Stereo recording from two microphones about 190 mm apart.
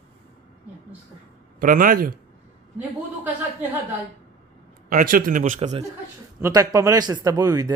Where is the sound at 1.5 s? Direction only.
45° right (ahead or behind).